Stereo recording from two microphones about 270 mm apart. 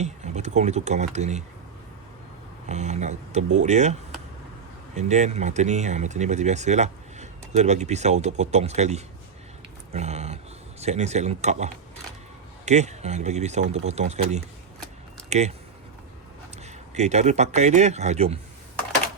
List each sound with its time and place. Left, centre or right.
0.0 s speech: right
2.6 s speech: right
4.9 s speech: right
16.9 s speech: right